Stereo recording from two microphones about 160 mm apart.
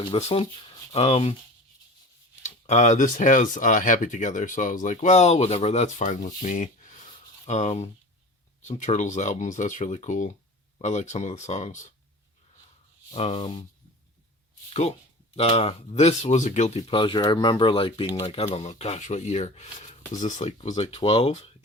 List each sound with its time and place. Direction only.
0.1 s speech: 40° left (ahead or behind)
2.4 s speech: 45° left (ahead or behind)
13.1 s speech: 40° left (ahead or behind)
14.7 s speech: 45° left (ahead or behind)